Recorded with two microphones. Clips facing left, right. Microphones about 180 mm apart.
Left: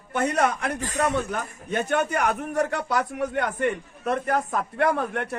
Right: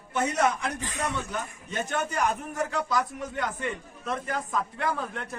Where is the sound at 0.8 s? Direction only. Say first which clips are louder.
Left 7 dB; 45° left (ahead or behind).